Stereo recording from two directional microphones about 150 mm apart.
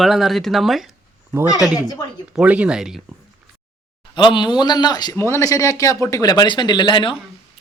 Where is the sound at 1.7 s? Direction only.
25° left (ahead or behind).